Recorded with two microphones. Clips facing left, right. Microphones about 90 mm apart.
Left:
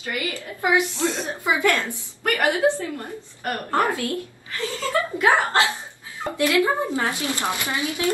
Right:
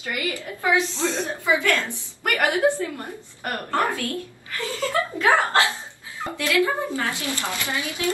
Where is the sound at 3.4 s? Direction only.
20° left (ahead or behind).